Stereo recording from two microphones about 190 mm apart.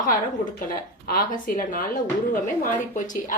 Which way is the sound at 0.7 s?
50° left (ahead or behind).